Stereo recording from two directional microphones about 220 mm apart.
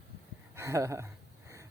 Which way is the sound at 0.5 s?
15° right (ahead or behind).